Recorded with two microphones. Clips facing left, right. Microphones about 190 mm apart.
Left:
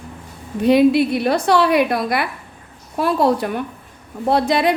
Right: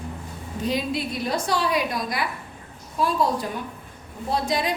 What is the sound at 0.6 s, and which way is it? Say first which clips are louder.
A woman's voice: left 13 dB; 65° left (ahead or behind).